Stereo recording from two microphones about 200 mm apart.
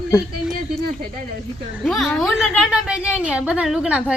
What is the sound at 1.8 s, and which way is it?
A woman's voice, centre (ahead or behind).